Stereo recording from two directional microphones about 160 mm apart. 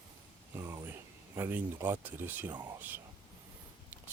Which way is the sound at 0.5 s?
15° right (ahead or behind).